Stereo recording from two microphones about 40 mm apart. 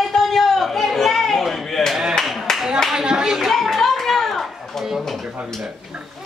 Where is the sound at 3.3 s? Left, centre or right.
Centre.